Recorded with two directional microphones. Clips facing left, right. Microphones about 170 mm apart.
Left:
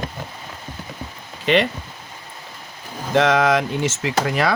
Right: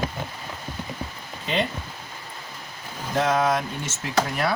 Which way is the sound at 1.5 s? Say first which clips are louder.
Left 8 dB; 90° left.